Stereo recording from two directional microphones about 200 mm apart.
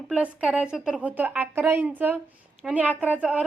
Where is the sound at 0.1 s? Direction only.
5° right (ahead or behind).